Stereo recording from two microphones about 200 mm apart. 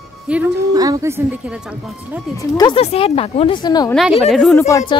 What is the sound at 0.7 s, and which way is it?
A woman's voice, 15° right (ahead or behind).